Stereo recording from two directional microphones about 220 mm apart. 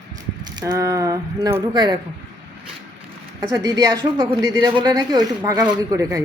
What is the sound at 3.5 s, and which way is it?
Speech, 15° right (ahead or behind).